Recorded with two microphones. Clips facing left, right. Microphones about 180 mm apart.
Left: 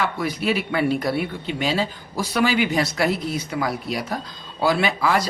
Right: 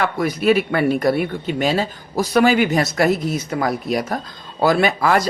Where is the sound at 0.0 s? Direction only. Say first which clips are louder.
Right 5 dB; 50° right (ahead or behind).